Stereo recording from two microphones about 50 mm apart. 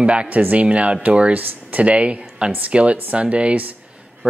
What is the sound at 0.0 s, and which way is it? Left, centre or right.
Speech, right.